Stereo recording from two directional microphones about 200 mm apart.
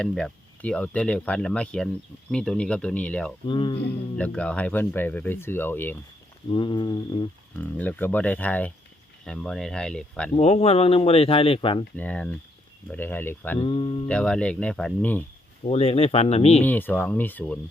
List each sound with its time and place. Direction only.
0.0 s speech: 5° left (ahead or behind)
3.4 s speech: 25° left (ahead or behind)
4.2 s speech: 5° left (ahead or behind)
6.5 s speech: 25° left (ahead or behind)
7.5 s speech: 10° left (ahead or behind)
10.3 s speech: 30° left (ahead or behind)
11.9 s speech: 5° left (ahead or behind)
13.6 s speech: 25° left (ahead or behind)
14.1 s speech: 5° left (ahead or behind)
15.6 s speech: 30° left (ahead or behind)
16.6 s speech: 10° left (ahead or behind)